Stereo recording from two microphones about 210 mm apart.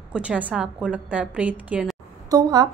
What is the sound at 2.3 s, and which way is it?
Speech, 20° right (ahead or behind).